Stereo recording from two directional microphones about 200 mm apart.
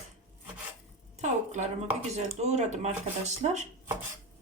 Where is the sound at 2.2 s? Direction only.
35° right (ahead or behind).